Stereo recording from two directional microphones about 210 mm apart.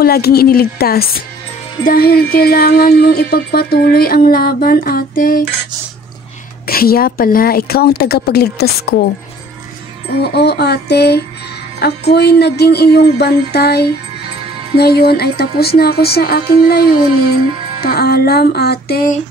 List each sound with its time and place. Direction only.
0.0 s speech: 45° left (ahead or behind)
6.7 s speech: 45° left (ahead or behind)
10.2 s speech: 50° left (ahead or behind)